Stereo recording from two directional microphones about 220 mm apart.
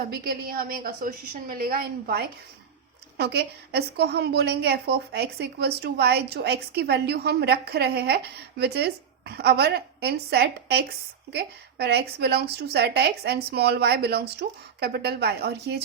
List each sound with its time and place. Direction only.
0.1 s a woman's voice: 40° right (ahead or behind)